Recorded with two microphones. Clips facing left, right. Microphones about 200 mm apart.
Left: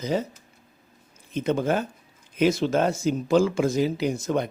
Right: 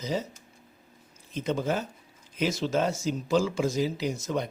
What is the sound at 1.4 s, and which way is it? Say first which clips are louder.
Speech: left 5 dB; 55° left (ahead or behind).